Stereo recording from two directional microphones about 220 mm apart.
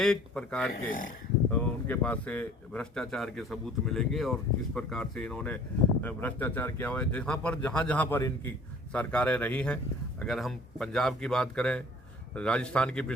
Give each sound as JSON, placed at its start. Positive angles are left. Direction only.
{"t": 0.0, "sound": "speech", "side_deg": 5}
{"t": 0.9, "sound": "speech", "side_deg": 40}
{"t": 1.5, "sound": "speech", "side_deg": 10}